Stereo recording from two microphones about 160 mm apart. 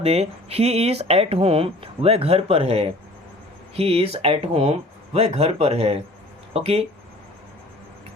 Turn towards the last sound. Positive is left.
turn(degrees=-40)  # may be behind; listen again after turning